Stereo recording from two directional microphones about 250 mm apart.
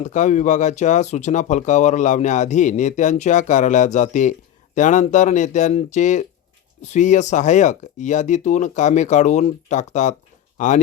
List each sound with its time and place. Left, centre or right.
0.0 s speech: left